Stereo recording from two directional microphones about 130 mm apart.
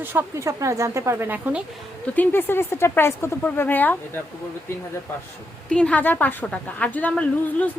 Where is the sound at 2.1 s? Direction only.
15° left (ahead or behind).